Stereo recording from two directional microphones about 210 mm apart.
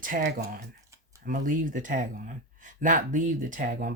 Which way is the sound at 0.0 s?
40° right (ahead or behind).